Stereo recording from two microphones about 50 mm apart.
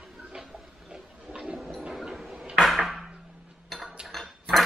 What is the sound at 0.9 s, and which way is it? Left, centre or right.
Toilet flush, centre.